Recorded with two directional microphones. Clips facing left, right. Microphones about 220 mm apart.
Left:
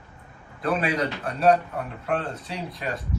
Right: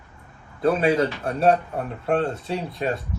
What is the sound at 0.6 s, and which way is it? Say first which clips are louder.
Speech: right 5 dB; 25° right (ahead or behind).